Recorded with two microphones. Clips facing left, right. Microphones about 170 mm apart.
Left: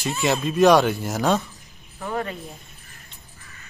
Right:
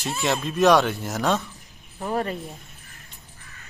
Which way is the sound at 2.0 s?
35° right (ahead or behind).